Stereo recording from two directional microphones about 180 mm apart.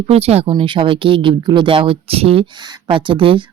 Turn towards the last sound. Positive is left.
turn(degrees=-30)  # may be behind; listen again after turning